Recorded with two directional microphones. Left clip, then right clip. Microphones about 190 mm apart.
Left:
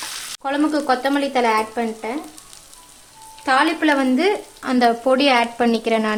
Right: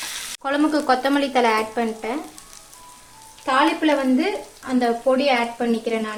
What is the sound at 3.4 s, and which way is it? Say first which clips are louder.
Speech: left 2 dB; 35° left (ahead or behind).